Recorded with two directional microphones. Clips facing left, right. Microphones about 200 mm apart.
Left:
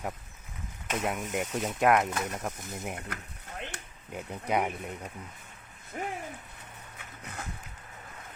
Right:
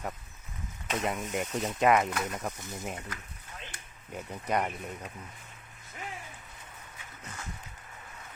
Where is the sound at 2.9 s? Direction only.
60° left (ahead or behind).